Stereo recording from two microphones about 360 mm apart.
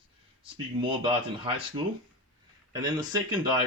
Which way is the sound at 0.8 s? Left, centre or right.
Centre.